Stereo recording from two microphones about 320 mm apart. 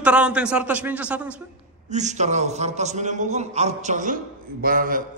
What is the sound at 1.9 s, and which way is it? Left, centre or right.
A man's voice, right.